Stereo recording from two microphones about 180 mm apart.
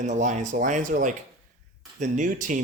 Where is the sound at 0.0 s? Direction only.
40° right (ahead or behind).